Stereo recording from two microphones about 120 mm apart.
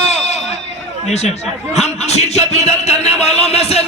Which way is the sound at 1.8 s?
65° left (ahead or behind).